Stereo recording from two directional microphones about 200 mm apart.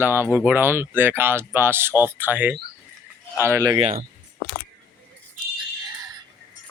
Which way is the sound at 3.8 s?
40° right (ahead or behind).